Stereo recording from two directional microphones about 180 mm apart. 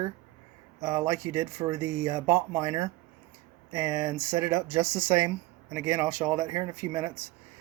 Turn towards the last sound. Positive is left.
turn(degrees=-15)  # may be behind; listen again after turning